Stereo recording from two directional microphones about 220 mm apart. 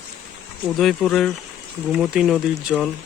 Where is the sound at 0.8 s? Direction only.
Centre (ahead or behind).